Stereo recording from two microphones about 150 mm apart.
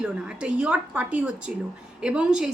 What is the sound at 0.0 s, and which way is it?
A woman's voice, 5° right (ahead or behind).